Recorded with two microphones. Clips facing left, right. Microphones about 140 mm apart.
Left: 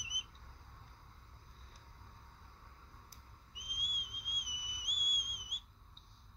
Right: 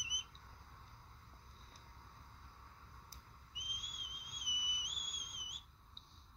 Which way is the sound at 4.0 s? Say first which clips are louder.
Left 3 dB; 25° right (ahead or behind).